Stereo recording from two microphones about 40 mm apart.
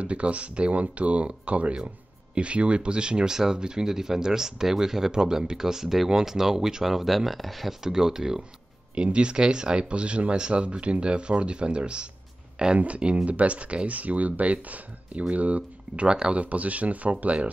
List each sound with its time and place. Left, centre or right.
0.0 s speech: right; by 7.7 s centre
7.8 s speech: centre
8.9 s speech: right
16.1 s speech: right
16.3 s speech: right